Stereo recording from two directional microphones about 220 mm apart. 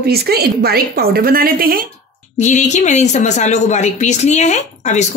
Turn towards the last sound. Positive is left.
turn(degrees=30)  # may be behind; listen again after turning